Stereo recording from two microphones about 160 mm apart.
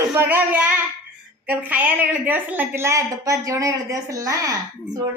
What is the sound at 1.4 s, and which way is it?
A woman's voice, 10° right (ahead or behind).